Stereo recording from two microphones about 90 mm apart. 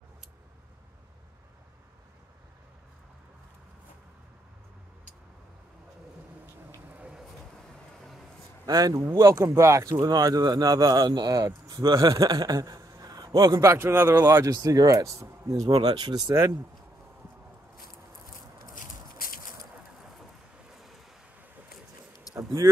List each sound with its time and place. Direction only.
6.9 s a sound: 15° right (ahead or behind)
8.6 s speech: 45° right (ahead or behind)
9.0 s speech: 30° right (ahead or behind)
9.8 s speech: 45° right (ahead or behind)
13.6 s a man's voice: 30° right (ahead or behind)
14.5 s speech: 40° right (ahead or behind)
22.3 s a sound: 35° right (ahead or behind)